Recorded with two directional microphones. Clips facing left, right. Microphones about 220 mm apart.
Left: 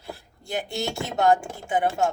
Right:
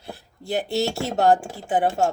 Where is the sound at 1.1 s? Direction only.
35° right (ahead or behind).